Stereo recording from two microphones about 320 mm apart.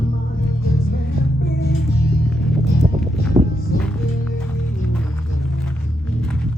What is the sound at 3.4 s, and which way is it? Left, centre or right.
Music, centre.